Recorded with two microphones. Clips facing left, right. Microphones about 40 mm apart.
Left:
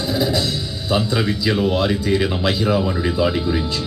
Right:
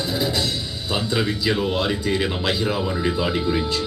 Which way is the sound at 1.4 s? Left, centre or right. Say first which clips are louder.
Left 3 dB; centre.